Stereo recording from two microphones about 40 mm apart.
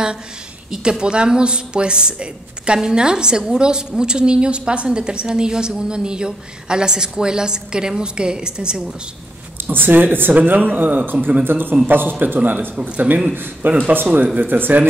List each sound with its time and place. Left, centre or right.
0.7 s a woman's voice: centre
9.6 s speech: right
10.3 s speech: right
12.7 s a man's voice: right
13.3 s speech: right
13.7 s a man's voice: right
14.4 s speech: right